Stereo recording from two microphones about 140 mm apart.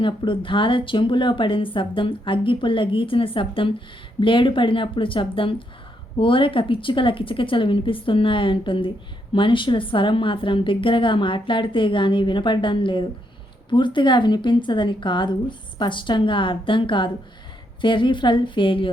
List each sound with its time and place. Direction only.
0.0 s speech: 35° left (ahead or behind)